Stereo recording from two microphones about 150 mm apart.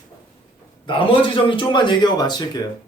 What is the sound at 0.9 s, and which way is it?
A man's voice, 35° left (ahead or behind).